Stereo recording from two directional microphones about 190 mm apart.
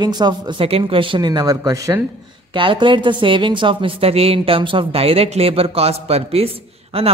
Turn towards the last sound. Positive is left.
turn(degrees=-30)  # may be behind; listen again after turning